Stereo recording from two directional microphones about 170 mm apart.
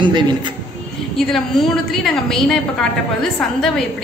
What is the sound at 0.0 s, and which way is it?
Speech, 25° right (ahead or behind).